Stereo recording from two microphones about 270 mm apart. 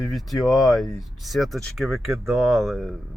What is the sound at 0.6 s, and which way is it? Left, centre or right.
Speech, centre.